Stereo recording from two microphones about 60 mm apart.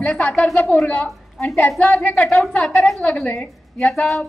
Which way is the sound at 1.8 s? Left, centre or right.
Left.